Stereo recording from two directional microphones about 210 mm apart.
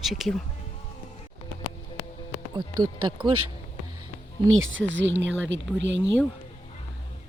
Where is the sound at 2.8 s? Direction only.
90° right.